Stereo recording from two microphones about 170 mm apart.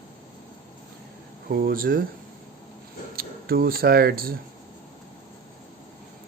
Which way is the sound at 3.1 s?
60° right (ahead or behind).